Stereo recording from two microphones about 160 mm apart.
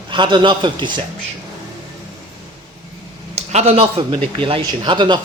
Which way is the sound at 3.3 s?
45° right (ahead or behind).